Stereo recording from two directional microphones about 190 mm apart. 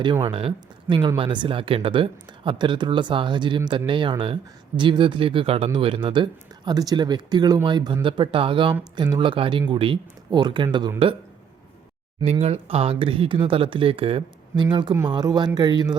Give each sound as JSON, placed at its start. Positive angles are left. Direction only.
{"t": 0.0, "sound": "speech", "side_deg": -25}
{"t": 12.2, "sound": "speech", "side_deg": -35}